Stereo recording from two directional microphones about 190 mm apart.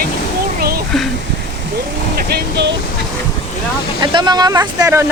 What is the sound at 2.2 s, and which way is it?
Vehicle, 55° right (ahead or behind).